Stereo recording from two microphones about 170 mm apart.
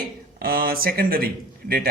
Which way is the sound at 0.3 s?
60° right (ahead or behind).